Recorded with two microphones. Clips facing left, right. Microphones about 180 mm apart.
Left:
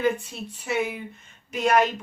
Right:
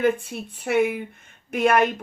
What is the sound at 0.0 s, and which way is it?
Speech, 55° right (ahead or behind).